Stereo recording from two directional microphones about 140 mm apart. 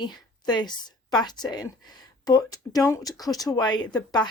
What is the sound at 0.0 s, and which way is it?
A woman's voice, 30° left (ahead or behind).